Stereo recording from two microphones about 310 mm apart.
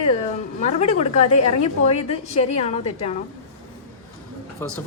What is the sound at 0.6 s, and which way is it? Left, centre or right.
A woman's voice, left.